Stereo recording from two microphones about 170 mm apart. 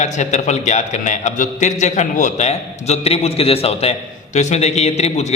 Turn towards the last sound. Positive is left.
turn(degrees=40)  # may be behind; listen again after turning